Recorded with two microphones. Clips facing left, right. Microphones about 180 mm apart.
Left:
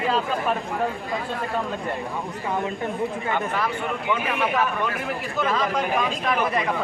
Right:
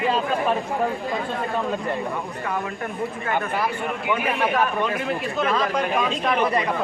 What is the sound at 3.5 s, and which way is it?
A man's voice, 10° right (ahead or behind).